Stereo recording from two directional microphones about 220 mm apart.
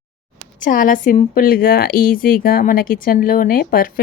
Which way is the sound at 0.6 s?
40° left (ahead or behind).